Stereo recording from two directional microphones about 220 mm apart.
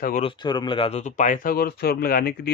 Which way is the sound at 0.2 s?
20° left (ahead or behind).